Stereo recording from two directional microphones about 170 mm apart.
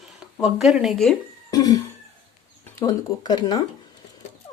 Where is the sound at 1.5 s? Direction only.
20° left (ahead or behind).